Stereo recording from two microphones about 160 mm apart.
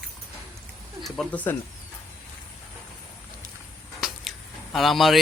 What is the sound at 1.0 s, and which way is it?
Speech, 5° left (ahead or behind).